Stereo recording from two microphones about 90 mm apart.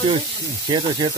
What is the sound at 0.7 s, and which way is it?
Speech, 60° right (ahead or behind).